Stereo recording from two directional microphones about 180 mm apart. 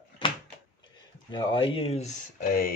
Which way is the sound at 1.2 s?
25° left (ahead or behind).